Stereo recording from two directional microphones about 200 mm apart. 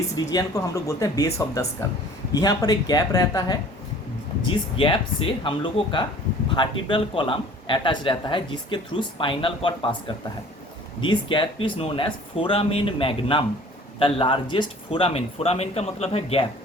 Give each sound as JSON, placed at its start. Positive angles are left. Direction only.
{"t": 0.2, "sound": "a man's voice", "side_deg": 20}
{"t": 11.0, "sound": "a man's voice", "side_deg": 25}